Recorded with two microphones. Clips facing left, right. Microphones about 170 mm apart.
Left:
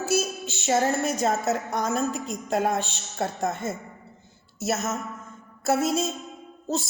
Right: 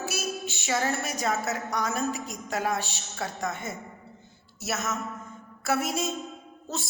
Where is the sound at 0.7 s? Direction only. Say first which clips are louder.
Left 5 dB; 40° left (ahead or behind).